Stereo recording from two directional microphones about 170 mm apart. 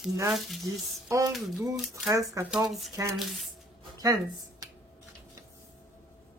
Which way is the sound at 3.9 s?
20° right (ahead or behind).